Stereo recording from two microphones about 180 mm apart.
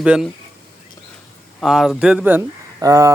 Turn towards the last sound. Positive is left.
turn(degrees=-20)  # may be behind; listen again after turning